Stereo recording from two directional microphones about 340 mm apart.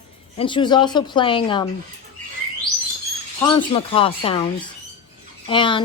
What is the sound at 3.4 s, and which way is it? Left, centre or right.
Speech, centre.